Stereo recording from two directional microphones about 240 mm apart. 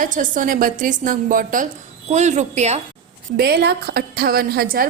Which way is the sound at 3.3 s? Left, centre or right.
Right.